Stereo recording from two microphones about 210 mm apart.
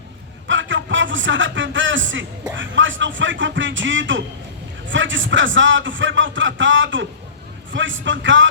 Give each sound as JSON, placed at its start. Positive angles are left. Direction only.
{"t": 0.4, "sound": "a man's voice", "side_deg": -65}